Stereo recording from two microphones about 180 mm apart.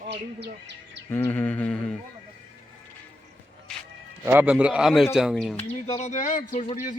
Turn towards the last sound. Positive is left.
turn(degrees=45)  # may be behind; listen again after turning